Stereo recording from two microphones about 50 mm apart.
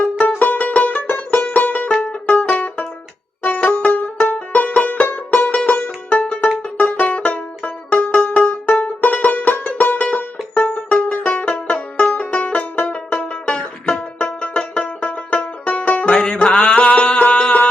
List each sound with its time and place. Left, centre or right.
0.0 s music: left